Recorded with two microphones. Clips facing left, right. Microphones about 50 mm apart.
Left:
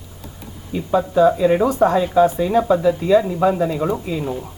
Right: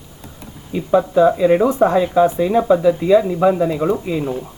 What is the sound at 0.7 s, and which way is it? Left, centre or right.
Speech, centre.